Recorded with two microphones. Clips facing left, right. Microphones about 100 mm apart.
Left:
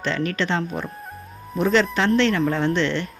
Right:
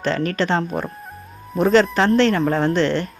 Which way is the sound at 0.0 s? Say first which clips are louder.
Right 3 dB; 40° right (ahead or behind).